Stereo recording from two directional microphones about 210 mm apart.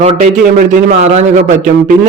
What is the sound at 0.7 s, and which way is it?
Speech, 35° right (ahead or behind).